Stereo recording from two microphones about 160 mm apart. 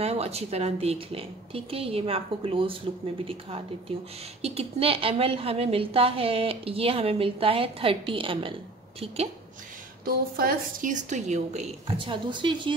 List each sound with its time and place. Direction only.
0.0 s a woman's voice: 40° right (ahead or behind)
10.0 s a woman's voice: 65° right (ahead or behind); by 11.6 s 45° right (ahead or behind)
12.0 s speech: 30° right (ahead or behind)